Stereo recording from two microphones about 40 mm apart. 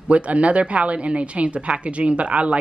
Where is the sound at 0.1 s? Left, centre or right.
Right.